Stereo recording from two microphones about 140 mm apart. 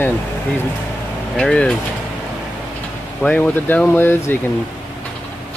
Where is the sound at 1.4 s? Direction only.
5° left (ahead or behind).